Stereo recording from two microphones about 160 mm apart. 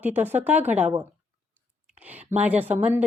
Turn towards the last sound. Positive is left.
turn(degrees=-10)  # may be behind; listen again after turning